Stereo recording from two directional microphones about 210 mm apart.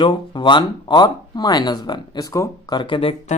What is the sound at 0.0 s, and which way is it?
Speech, 20° left (ahead or behind).